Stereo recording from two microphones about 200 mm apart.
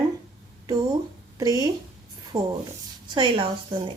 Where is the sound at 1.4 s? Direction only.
20° right (ahead or behind).